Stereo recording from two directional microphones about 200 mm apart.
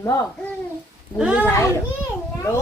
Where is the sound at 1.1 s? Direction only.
5° right (ahead or behind).